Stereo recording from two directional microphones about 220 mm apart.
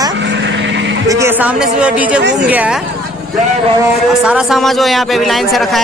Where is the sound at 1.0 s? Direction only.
15° right (ahead or behind).